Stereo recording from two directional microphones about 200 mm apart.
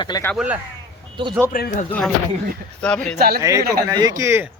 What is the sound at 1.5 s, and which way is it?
Speech, 45° left (ahead or behind).